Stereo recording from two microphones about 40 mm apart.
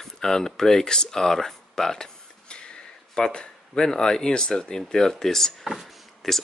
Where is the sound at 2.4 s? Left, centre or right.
Left.